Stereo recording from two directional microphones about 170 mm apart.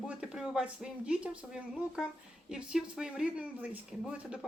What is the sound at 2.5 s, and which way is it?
A woman's voice, 5° right (ahead or behind).